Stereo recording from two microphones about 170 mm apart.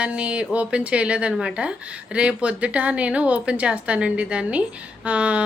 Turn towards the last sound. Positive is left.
turn(degrees=-5)  # may be behind; listen again after turning